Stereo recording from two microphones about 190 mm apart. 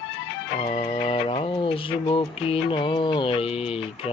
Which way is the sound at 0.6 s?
25° left (ahead or behind).